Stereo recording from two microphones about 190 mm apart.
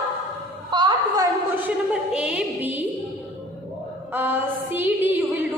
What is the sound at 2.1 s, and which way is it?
Music, 5° right (ahead or behind).